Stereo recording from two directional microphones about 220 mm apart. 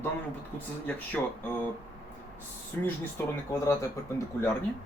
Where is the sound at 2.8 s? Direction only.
10° left (ahead or behind).